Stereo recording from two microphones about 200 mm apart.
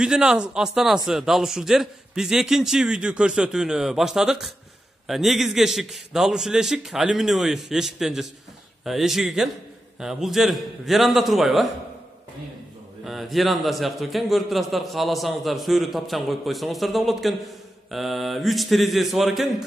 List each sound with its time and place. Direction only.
0.0 s a man's voice: 5° right (ahead or behind)
13.0 s a man's voice: centre (ahead or behind)